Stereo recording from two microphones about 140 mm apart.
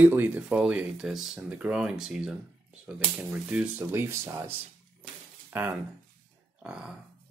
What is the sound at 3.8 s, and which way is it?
Speech, 20° right (ahead or behind).